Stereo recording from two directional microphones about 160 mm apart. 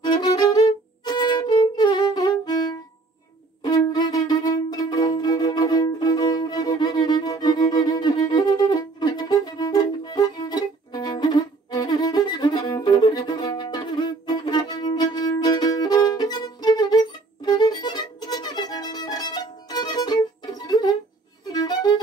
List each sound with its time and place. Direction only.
0.0 s violin: 25° left (ahead or behind)
3.6 s music: 25° left (ahead or behind)
21.5 s violin: 25° left (ahead or behind)